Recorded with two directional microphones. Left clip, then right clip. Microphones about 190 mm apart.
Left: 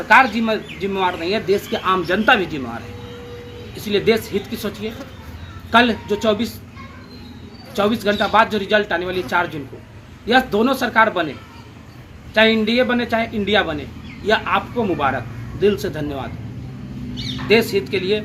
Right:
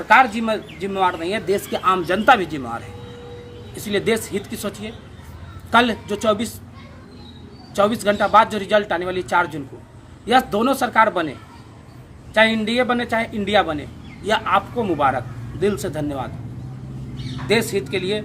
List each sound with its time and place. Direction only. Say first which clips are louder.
0.1 s a man's voice: left 1 dB; 25° right (ahead or behind)
3.8 s a man's voice: left 3 dB; 25° right (ahead or behind)
5.7 s a man's voice: left 2 dB; 25° right (ahead or behind)
7.8 s a man's voice: right 1 dB; 25° right (ahead or behind)
12.3 s a man's voice: left 2 dB; 25° right (ahead or behind)
17.5 s a man's voice: left 3 dB; 25° right (ahead or behind)